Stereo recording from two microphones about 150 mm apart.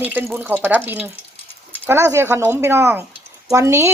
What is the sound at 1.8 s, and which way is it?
Speech, 15° right (ahead or behind).